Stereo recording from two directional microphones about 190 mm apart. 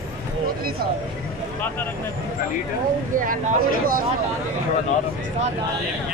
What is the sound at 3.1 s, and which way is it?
Speech, 45° right (ahead or behind).